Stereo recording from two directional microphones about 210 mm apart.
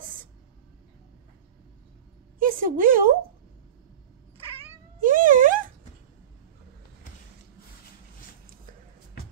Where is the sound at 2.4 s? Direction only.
40° right (ahead or behind).